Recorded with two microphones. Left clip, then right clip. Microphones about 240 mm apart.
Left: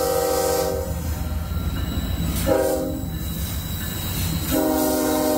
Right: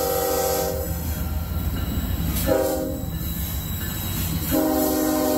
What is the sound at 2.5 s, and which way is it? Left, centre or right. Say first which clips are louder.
Train: left 2 dB; centre.